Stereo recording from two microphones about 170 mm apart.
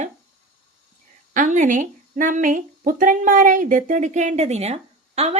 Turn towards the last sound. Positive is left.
turn(degrees=-35)  # may be behind; listen again after turning